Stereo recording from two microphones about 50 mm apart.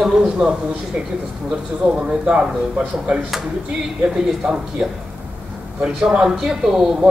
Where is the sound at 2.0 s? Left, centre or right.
Centre.